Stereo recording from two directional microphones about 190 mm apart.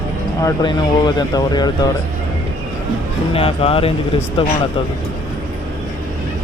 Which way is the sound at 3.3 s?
30° left (ahead or behind).